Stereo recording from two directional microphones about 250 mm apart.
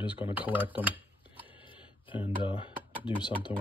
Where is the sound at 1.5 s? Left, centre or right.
Left.